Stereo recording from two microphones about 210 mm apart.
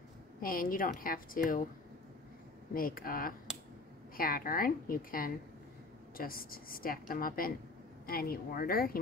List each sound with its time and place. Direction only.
0.4 s a woman's voice: 45° left (ahead or behind)
2.7 s a woman's voice: 45° left (ahead or behind)